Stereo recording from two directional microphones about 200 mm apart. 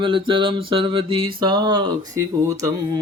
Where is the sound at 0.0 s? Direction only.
25° right (ahead or behind).